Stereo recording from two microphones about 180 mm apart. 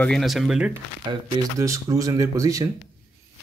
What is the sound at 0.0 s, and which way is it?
Speech, centre (ahead or behind).